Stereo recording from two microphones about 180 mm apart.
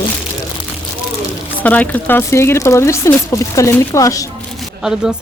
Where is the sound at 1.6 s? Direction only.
10° left (ahead or behind).